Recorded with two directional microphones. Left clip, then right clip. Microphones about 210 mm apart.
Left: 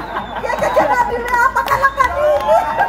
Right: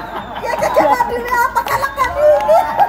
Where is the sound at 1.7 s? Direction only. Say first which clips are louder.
Left 3 dB; 35° right (ahead or behind).